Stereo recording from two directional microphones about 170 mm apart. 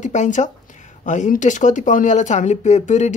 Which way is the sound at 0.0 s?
45° left (ahead or behind).